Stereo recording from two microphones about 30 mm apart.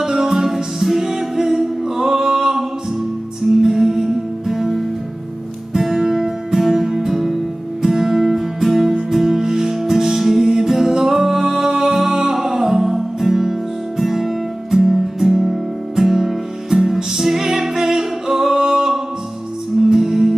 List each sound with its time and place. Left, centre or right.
0.0 s music: centre
3.6 s music: centre
18.6 s singing: centre
19.9 s music: centre